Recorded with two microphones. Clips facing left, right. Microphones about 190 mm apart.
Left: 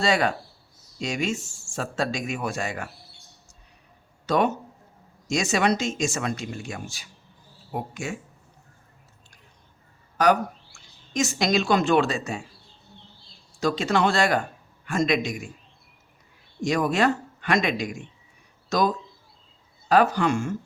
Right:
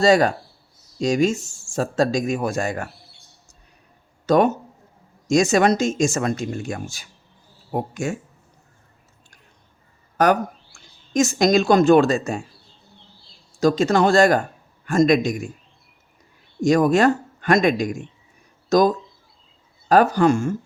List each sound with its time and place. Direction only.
0.0 s speech: 40° right (ahead or behind)
4.3 s speech: 45° right (ahead or behind)
10.2 s speech: 50° right (ahead or behind)
13.6 s speech: 45° right (ahead or behind)
16.6 s speech: 45° right (ahead or behind)